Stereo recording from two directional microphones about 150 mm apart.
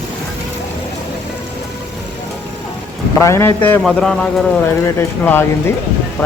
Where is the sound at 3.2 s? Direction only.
20° left (ahead or behind).